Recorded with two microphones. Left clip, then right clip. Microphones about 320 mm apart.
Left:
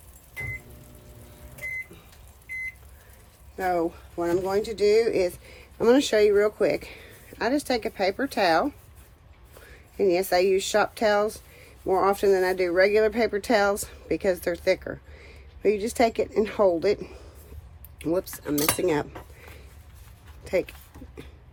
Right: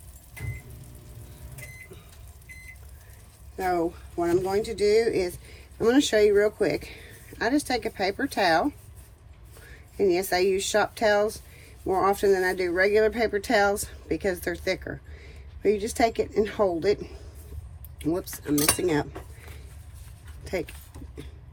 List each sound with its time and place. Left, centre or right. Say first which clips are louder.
3.6 s speech: left 1 dB; left
9.6 s speech: left 1 dB; left
20.4 s dog: left 5 dB; left